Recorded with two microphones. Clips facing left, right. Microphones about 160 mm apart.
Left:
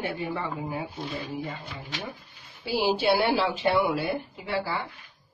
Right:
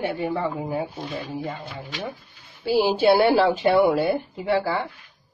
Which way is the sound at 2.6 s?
50° right (ahead or behind).